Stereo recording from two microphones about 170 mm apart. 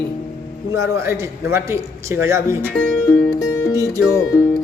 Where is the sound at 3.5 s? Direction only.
15° left (ahead or behind).